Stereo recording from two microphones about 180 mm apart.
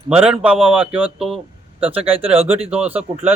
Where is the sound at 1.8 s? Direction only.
30° right (ahead or behind).